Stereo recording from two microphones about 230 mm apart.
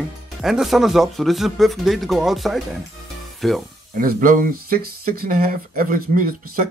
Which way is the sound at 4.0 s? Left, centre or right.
Right.